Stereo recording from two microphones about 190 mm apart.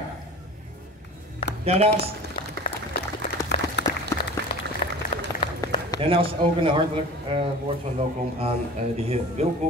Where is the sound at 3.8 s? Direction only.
65° left (ahead or behind).